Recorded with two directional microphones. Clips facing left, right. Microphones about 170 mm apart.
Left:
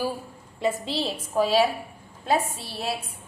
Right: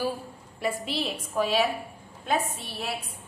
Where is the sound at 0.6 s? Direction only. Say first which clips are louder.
Left 3 dB; 25° left (ahead or behind).